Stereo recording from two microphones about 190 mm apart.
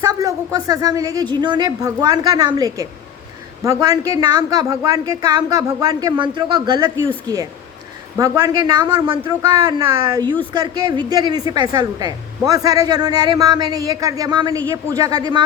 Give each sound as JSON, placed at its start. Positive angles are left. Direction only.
{"t": 0.0, "sound": "a woman's voice", "side_deg": -20}
{"t": 8.2, "sound": "a woman's voice", "side_deg": -20}